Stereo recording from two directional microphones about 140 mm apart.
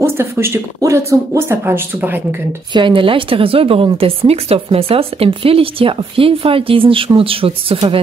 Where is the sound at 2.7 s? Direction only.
35° right (ahead or behind).